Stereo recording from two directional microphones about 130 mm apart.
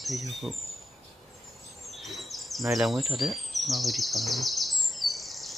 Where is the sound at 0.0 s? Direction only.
Centre (ahead or behind).